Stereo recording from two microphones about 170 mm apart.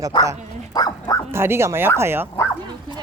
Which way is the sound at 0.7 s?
20° left (ahead or behind).